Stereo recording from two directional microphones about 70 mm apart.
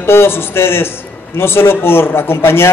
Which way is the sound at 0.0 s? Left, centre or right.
Left.